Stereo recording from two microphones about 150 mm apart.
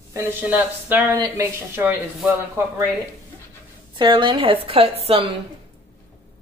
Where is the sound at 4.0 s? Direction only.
35° right (ahead or behind).